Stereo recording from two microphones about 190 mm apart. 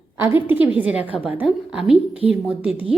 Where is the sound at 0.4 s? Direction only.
10° right (ahead or behind).